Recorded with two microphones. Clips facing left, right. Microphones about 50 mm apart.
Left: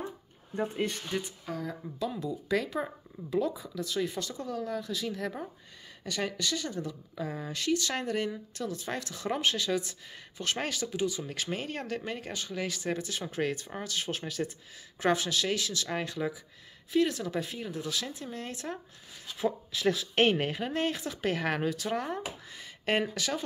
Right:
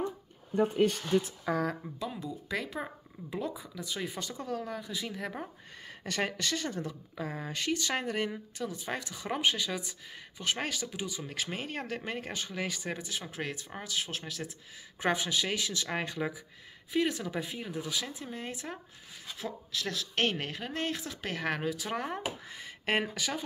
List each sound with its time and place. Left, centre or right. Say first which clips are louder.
2.0 s speech: left 4 dB; centre
3.8 s speech: left 5 dB; centre
6.0 s speech: even; right; by 14.5 s centre
15.0 s speech: left 2 dB; centre
19.4 s speech: left 8 dB; centre